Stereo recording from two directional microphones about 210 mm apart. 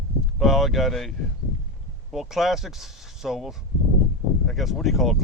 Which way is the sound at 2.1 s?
Centre (ahead or behind).